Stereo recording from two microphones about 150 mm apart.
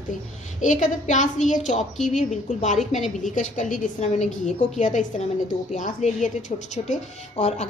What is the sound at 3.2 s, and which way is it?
A woman's voice, 55° left (ahead or behind).